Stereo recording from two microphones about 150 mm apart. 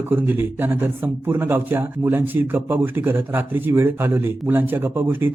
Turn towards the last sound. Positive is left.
turn(degrees=-15)  # may be behind; listen again after turning